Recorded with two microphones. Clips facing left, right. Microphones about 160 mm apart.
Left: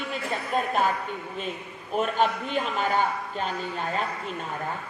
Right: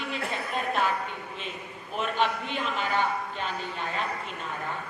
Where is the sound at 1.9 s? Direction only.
40° left (ahead or behind).